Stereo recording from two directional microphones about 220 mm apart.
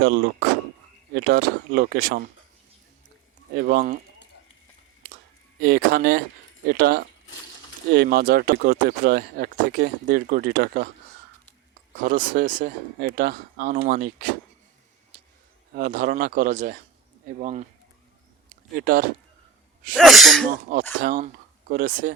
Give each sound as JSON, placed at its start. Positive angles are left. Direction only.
{"t": 0.0, "sound": "speech", "side_deg": -50}
{"t": 3.5, "sound": "a man's voice", "side_deg": -40}
{"t": 5.6, "sound": "speech", "side_deg": -45}
{"t": 11.9, "sound": "a man's voice", "side_deg": -40}
{"t": 15.7, "sound": "a man's voice", "side_deg": -40}
{"t": 18.8, "sound": "a man's voice", "side_deg": -40}
{"t": 20.0, "sound": "speech", "side_deg": 0}
{"t": 20.5, "sound": "a man's voice", "side_deg": -40}